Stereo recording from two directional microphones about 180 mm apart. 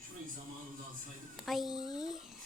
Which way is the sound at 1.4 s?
Centre (ahead or behind).